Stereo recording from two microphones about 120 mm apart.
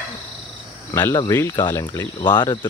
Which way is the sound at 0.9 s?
20° left (ahead or behind).